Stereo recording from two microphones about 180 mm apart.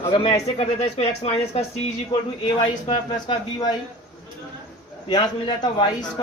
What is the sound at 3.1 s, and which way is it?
Speech, 20° left (ahead or behind).